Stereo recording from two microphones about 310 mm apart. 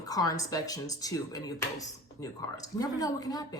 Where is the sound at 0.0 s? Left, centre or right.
Centre.